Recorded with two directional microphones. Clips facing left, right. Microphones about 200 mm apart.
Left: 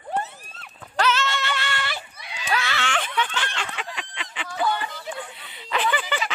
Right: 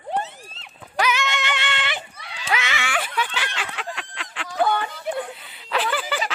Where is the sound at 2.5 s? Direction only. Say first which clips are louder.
Even; 20° right (ahead or behind); by 4.4 s centre (ahead or behind).